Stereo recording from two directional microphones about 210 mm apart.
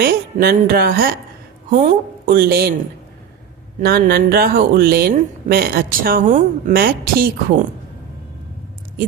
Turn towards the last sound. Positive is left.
turn(degrees=-45)  # may be behind; listen again after turning